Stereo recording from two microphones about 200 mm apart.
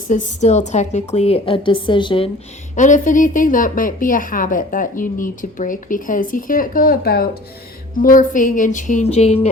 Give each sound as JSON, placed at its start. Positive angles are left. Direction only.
{"t": 0.1, "sound": "a woman's voice", "side_deg": 35}
{"t": 2.7, "sound": "a woman's voice", "side_deg": 40}